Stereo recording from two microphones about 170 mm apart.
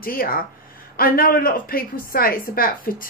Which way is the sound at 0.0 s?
60° left (ahead or behind).